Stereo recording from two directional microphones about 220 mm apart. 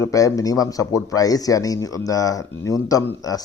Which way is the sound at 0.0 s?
15° left (ahead or behind).